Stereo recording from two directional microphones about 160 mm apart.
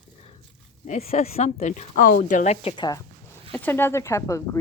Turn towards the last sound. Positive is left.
turn(degrees=20)  # may be behind; listen again after turning